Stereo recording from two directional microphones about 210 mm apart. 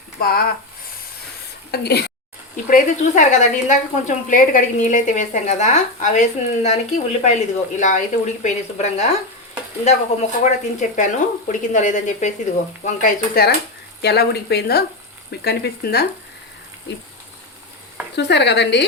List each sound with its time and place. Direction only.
0.2 s speech: 45° left (ahead or behind)
1.7 s speech: 50° left (ahead or behind)
2.6 s speech: 40° left (ahead or behind)
18.2 s speech: 55° left (ahead or behind)